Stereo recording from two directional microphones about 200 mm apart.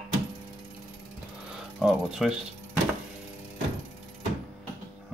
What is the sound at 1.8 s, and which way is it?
Speech, 5° right (ahead or behind).